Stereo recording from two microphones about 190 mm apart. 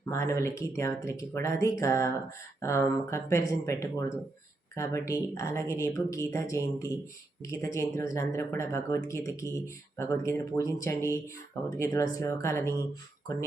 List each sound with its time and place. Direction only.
0.0 s speech: 15° left (ahead or behind)